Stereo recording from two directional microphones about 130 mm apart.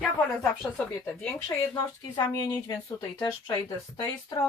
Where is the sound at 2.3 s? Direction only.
30° left (ahead or behind).